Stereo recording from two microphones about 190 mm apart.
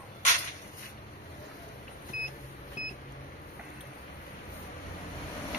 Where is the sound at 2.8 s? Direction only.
40° left (ahead or behind).